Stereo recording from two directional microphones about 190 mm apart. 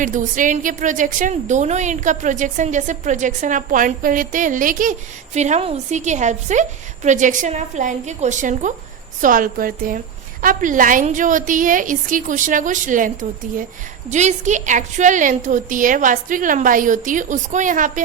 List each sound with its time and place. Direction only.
0.0 s a woman's voice: 45° right (ahead or behind)
14.1 s a woman's voice: 40° right (ahead or behind)